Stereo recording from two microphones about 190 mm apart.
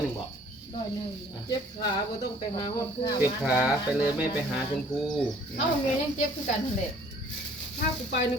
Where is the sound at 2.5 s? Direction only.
25° left (ahead or behind).